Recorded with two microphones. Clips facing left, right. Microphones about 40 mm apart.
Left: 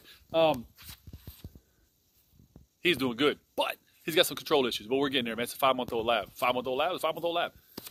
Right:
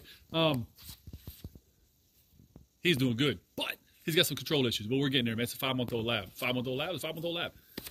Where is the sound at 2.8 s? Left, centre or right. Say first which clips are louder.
Left 2 dB; centre.